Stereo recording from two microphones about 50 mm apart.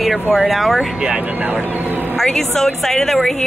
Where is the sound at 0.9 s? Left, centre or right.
Centre.